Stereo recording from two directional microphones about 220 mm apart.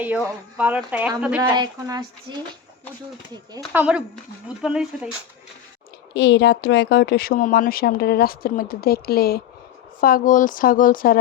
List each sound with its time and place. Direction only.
0.0 s speech: 5° right (ahead or behind)
1.5 s speech: 20° right (ahead or behind)
3.6 s speech: 5° right (ahead or behind)
6.1 s speech: 50° left (ahead or behind)